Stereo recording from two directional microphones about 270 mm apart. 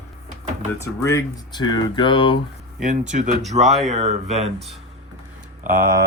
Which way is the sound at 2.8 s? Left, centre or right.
Right.